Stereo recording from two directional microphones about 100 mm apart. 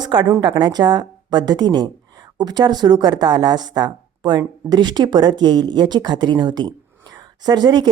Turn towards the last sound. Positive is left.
turn(degrees=-45)  # may be behind; listen again after turning